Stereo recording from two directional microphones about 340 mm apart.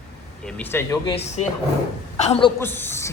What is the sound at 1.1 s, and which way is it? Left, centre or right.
A woman's voice, centre.